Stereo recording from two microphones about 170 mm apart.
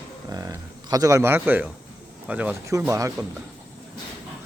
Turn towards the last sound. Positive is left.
turn(degrees=-20)  # may be behind; listen again after turning